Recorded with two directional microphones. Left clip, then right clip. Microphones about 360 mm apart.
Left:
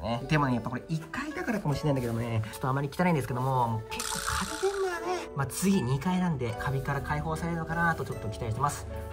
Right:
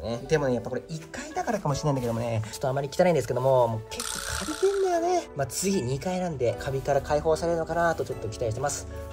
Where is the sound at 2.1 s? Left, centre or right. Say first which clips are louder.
Right 5 dB; centre.